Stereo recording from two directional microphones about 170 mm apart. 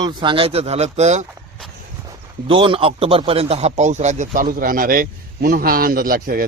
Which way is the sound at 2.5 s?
30° right (ahead or behind).